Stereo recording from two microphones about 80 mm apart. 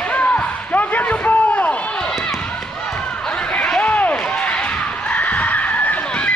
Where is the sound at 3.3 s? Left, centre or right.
Centre.